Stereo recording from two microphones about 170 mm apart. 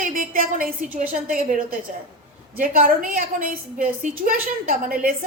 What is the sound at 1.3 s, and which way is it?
A woman's voice, 55° right (ahead or behind).